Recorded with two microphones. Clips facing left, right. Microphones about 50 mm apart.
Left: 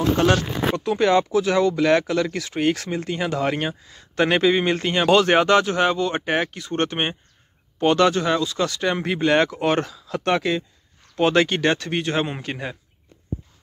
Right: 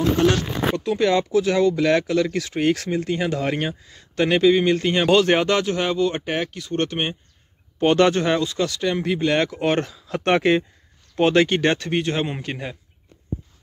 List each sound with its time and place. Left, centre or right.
0.3 s speech: centre
1.3 s speech: centre
4.1 s speech: centre
4.8 s speech: centre
7.8 s speech: centre
8.5 s speech: centre
8.8 s speech: centre
9.5 s speech: centre
10.0 s speech: right
11.2 s speech: centre